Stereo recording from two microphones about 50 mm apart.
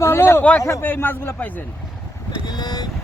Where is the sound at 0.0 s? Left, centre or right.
Left.